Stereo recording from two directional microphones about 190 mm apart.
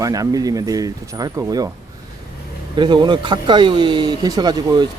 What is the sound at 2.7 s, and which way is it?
Speech, 25° right (ahead or behind).